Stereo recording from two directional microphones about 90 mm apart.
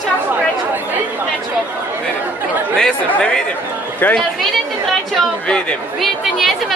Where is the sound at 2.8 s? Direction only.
10° left (ahead or behind).